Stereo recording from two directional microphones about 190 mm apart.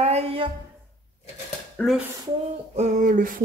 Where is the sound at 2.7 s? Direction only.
40° right (ahead or behind).